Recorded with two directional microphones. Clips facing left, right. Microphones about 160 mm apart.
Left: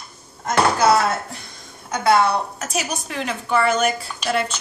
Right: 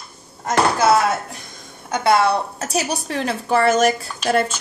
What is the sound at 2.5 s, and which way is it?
Speech, 35° right (ahead or behind).